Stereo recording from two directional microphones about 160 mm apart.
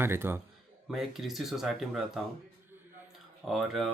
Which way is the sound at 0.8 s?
Centre (ahead or behind).